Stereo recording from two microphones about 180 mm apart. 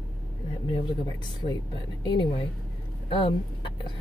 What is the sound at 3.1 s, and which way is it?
Speech, 30° left (ahead or behind).